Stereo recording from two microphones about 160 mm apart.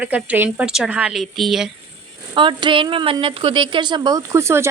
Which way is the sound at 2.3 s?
30° right (ahead or behind).